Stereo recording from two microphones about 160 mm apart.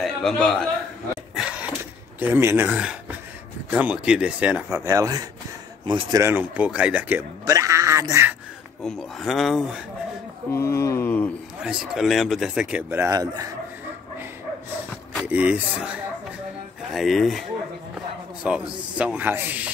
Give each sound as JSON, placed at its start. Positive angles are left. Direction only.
{"t": 0.0, "sound": "a man's voice", "side_deg": 5}
{"t": 1.3, "sound": "a sound", "side_deg": -5}
{"t": 2.1, "sound": "a man's voice", "side_deg": -10}
{"t": 6.2, "sound": "speech", "side_deg": -10}
{"t": 8.8, "sound": "speech", "side_deg": 0}
{"t": 10.5, "sound": "a sound", "side_deg": 15}
{"t": 11.6, "sound": "speech", "side_deg": -5}
{"t": 15.2, "sound": "speech", "side_deg": -10}